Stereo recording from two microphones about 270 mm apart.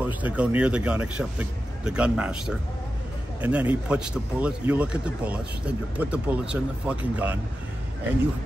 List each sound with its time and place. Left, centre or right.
0.0 s speech: centre